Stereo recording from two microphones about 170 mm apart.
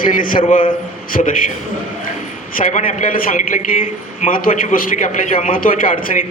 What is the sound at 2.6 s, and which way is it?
A man's voice, 45° left (ahead or behind).